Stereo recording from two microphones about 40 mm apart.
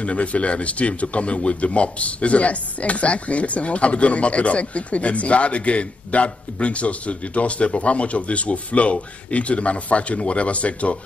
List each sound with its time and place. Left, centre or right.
0.0 s speech: left